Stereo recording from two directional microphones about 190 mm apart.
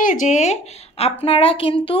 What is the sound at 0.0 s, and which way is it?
A woman's voice, 40° left (ahead or behind).